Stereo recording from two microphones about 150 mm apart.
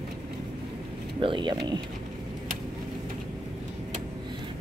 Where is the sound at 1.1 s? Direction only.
35° right (ahead or behind).